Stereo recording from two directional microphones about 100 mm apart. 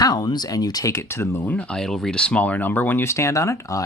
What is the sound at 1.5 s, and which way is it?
Speech, 5° left (ahead or behind).